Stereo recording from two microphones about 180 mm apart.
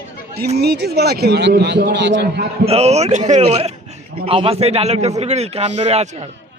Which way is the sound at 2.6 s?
35° right (ahead or behind).